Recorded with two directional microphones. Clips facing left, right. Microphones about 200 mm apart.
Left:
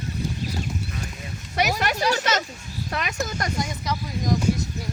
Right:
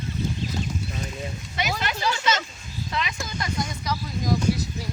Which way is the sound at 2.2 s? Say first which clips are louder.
Left 1 dB; 40° left (ahead or behind).